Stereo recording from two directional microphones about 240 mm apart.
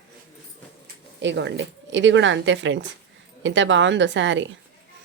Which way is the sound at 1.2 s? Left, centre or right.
Right.